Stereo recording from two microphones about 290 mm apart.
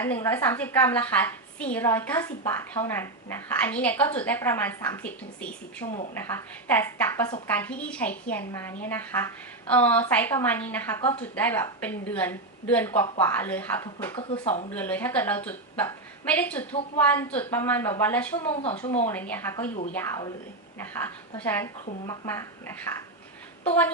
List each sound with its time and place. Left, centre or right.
0.0 s a woman's voice: centre
14.2 s speech: centre
14.7 s a woman's voice: centre
18.5 s speech: left
19.0 s a woman's voice: centre